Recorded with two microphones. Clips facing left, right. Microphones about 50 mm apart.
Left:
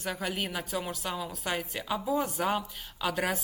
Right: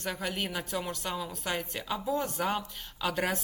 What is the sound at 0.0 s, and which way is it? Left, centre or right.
Speech, centre.